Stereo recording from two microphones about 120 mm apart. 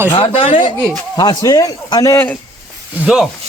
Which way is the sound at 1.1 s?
35° left (ahead or behind).